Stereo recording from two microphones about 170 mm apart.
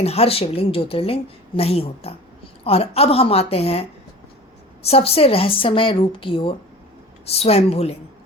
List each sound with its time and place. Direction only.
0.0 s a woman's voice: 35° left (ahead or behind)